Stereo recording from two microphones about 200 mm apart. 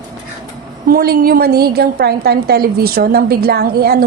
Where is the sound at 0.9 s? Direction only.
50° right (ahead or behind).